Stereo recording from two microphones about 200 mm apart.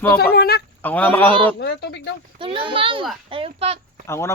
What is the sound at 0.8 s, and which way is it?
Speech, 10° left (ahead or behind).